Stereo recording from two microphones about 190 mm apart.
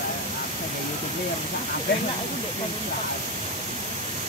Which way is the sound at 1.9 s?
60° left (ahead or behind).